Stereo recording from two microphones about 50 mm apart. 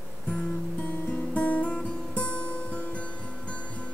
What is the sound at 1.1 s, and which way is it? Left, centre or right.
Music, left.